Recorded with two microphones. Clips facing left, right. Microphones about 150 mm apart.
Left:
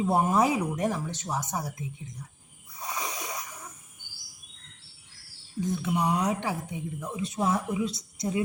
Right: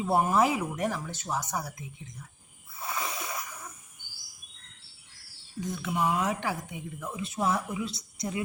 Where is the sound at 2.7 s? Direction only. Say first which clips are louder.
Even; 20° left (ahead or behind).